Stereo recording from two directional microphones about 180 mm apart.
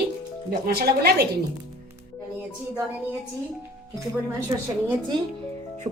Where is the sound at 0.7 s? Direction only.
60° right (ahead or behind).